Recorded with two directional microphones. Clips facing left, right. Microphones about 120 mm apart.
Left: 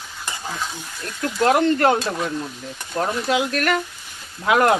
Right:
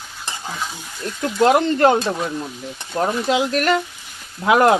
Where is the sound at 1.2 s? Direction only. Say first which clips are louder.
Right 2 dB; 20° right (ahead or behind).